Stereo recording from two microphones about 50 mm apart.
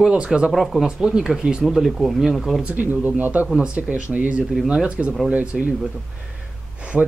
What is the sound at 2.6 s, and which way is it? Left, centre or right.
Speech, right.